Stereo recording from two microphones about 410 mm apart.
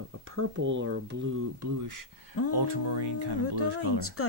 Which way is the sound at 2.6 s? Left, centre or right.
Right.